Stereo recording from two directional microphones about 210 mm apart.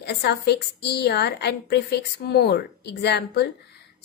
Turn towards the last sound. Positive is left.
turn(degrees=50)  # may be behind; listen again after turning